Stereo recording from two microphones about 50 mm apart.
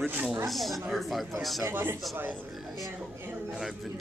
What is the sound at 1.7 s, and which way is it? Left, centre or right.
Speech, right.